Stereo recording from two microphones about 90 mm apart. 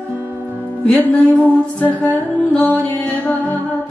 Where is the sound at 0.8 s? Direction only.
15° left (ahead or behind).